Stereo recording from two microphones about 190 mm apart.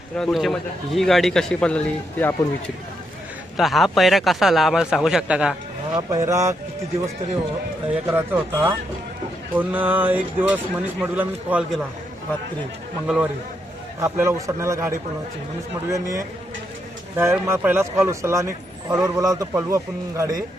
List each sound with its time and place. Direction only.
0.2 s a man's voice: centre (ahead or behind)
3.6 s a man's voice: centre (ahead or behind)
6.0 s a man's voice: 15° right (ahead or behind)
7.9 s a man's voice: 10° right (ahead or behind)
13.1 s a man's voice: 5° right (ahead or behind)